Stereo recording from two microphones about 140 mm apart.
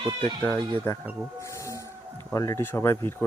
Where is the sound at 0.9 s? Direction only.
15° left (ahead or behind).